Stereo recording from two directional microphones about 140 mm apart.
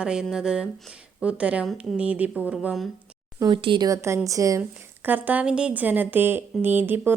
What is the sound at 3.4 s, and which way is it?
Speech, 35° right (ahead or behind).